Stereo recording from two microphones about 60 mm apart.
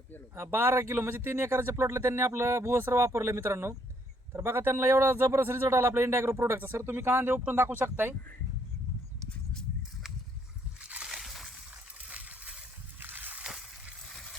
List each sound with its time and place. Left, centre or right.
0.3 s a man's voice: right
5.4 s a man's voice: right
10.8 s slosh: centre
11.9 s water: right
13.0 s slosh: right